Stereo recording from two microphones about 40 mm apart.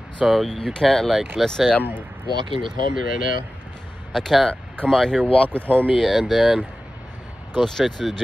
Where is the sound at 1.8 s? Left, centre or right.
Right.